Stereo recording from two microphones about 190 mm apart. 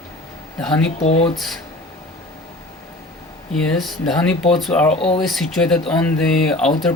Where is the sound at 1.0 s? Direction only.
30° left (ahead or behind).